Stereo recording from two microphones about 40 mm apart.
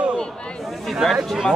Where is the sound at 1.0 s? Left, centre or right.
Centre.